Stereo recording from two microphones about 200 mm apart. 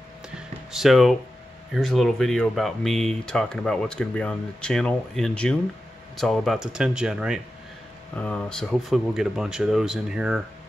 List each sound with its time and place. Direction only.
0.7 s speech: centre (ahead or behind)
8.2 s speech: 5° left (ahead or behind)